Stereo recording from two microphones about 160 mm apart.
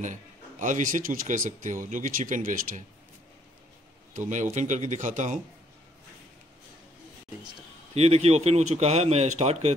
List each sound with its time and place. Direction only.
0.0 s speech: 50° right (ahead or behind)
4.1 s speech: 50° right (ahead or behind)
7.9 s speech: 40° right (ahead or behind)